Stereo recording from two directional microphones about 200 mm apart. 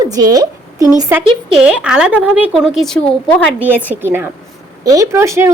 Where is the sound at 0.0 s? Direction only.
20° right (ahead or behind).